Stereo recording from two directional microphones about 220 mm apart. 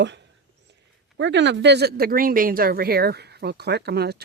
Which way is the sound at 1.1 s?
55° right (ahead or behind).